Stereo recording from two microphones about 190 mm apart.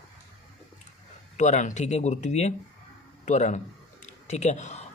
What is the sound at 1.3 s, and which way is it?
Speech, 40° left (ahead or behind).